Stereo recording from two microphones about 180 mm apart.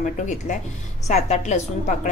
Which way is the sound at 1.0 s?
40° left (ahead or behind).